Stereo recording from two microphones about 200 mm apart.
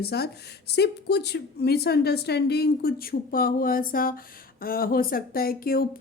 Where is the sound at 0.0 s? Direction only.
50° left (ahead or behind).